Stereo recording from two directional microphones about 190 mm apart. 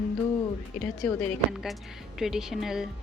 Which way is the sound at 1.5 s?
5° right (ahead or behind).